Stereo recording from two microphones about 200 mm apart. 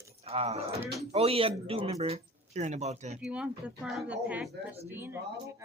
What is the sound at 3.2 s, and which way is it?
Speech, 5° right (ahead or behind).